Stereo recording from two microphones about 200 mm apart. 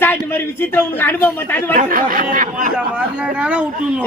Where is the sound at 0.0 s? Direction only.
10° left (ahead or behind).